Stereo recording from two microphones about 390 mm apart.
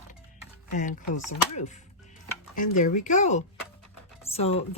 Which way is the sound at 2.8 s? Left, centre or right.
Centre.